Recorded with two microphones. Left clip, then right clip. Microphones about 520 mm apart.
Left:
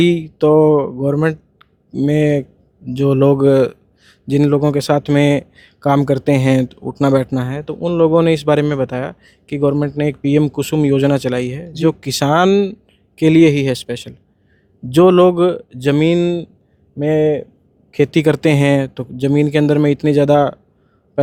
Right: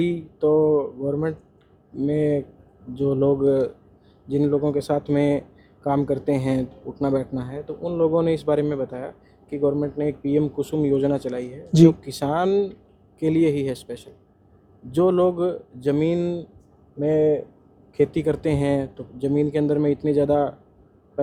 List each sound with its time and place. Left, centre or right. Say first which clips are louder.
0.0 s speech: left 9 dB; left